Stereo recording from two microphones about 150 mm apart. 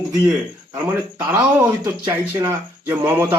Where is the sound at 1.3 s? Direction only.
10° right (ahead or behind).